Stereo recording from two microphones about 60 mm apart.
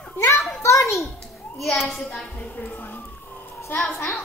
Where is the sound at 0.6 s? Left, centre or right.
Left.